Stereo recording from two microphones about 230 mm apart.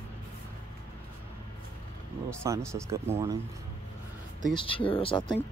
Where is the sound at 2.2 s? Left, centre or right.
Centre.